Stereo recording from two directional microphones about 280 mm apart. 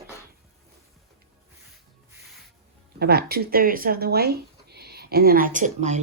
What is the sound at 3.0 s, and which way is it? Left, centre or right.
Speech, right.